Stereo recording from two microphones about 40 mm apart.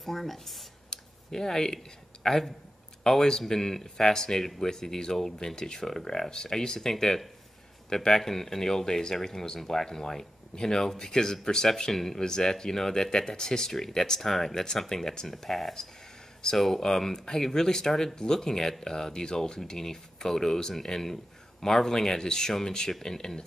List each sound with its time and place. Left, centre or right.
0.0 s speech: centre
0.8 s a sound: centre
2.2 s speech: centre